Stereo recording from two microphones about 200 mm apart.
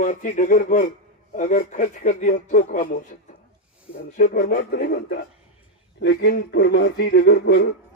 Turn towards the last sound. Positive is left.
turn(degrees=55)  # may be behind; listen again after turning